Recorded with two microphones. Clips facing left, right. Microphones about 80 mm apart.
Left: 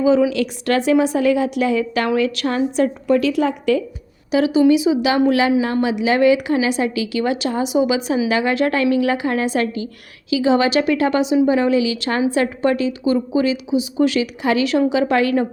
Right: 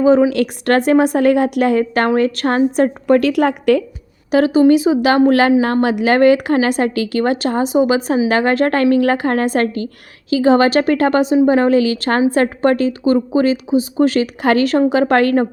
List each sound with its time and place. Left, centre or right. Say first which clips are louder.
0.0 s a woman's voice: right 4 dB; right
4.3 s a woman's voice: right 3 dB; right